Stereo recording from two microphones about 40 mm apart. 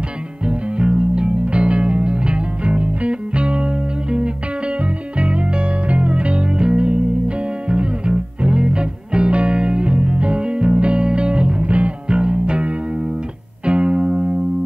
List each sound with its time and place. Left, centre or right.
0.5 s music: right